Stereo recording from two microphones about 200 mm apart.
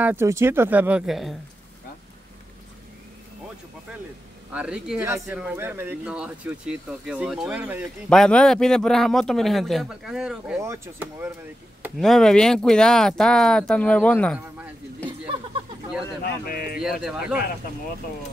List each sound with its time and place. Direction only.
0.0 s speech: 10° right (ahead or behind)
4.5 s a man's voice: 5° right (ahead or behind)
8.1 s a man's voice: 5° left (ahead or behind); by 11.3 s 10° right (ahead or behind)
12.0 s a man's voice: centre (ahead or behind)
16.4 s speech: 45° left (ahead or behind)
16.8 s a man's voice: centre (ahead or behind)